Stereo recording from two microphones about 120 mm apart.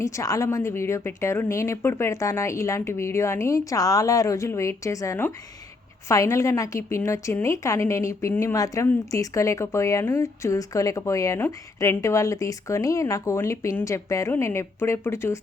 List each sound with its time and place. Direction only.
0.0 s a woman's voice: 25° left (ahead or behind)